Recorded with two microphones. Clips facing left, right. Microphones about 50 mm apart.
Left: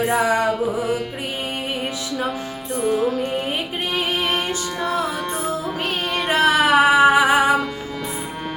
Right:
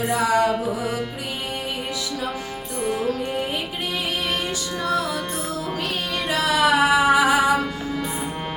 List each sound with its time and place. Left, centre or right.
0.1 s music: left
3.9 s music: left
6.1 s music: left